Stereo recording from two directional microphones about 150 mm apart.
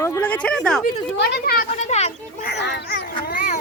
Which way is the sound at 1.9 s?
45° left (ahead or behind).